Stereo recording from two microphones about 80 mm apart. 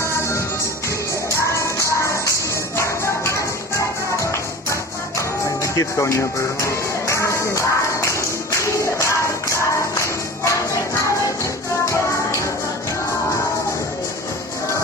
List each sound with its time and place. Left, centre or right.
1.5 s music: left
2.8 s a sound: left
4.2 s music: left